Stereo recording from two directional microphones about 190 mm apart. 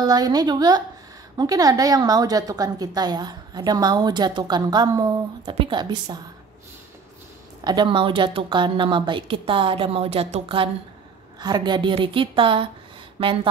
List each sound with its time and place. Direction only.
0.0 s a woman's voice: 20° right (ahead or behind)
7.6 s a woman's voice: 25° right (ahead or behind)